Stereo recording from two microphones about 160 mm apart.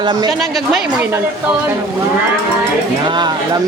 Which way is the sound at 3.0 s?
30° right (ahead or behind).